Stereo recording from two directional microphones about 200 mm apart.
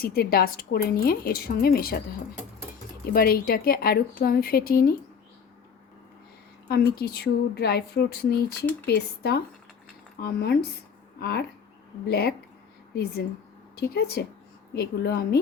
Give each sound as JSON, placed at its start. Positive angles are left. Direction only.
{"t": 0.0, "sound": "a woman's voice", "side_deg": 50}
{"t": 3.1, "sound": "a woman's voice", "side_deg": 50}
{"t": 6.7, "sound": "a woman's voice", "side_deg": 55}
{"t": 13.7, "sound": "a woman's voice", "side_deg": 50}